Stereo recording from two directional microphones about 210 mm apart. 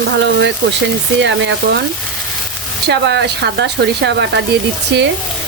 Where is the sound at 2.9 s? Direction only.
55° right (ahead or behind).